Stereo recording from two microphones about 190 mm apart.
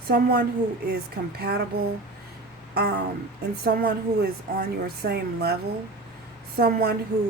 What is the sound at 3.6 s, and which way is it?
A woman's voice, 55° right (ahead or behind).